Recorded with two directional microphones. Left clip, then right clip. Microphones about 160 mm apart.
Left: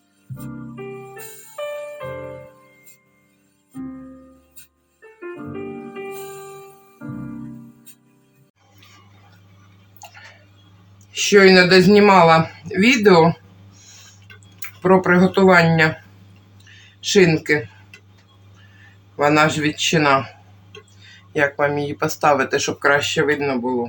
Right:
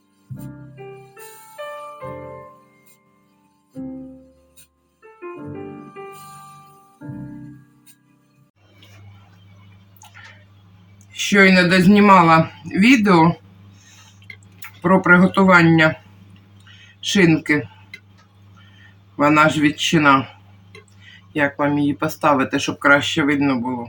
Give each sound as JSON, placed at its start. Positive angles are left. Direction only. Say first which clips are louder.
{"t": 11.3, "sound": "speech", "louder": "left 3 dB", "side_deg": 30}
{"t": 14.8, "sound": "speech", "louder": "right 1 dB", "side_deg": 40}
{"t": 17.1, "sound": "speech", "louder": "left 1 dB", "side_deg": 35}
{"t": 19.1, "sound": "speech", "louder": "right 1 dB", "side_deg": 35}
{"t": 21.3, "sound": "speech", "louder": "left 1 dB", "side_deg": 40}